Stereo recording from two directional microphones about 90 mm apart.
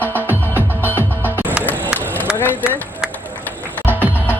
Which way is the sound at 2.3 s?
20° left (ahead or behind).